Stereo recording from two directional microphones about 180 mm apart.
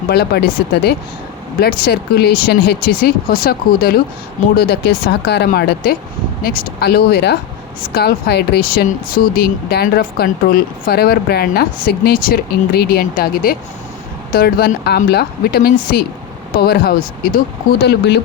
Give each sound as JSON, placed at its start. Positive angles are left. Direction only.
{"t": 0.1, "sound": "speech", "side_deg": 65}
{"t": 17.8, "sound": "speech", "side_deg": 70}